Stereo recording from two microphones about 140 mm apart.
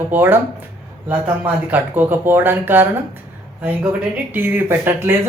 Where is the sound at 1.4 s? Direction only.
15° right (ahead or behind).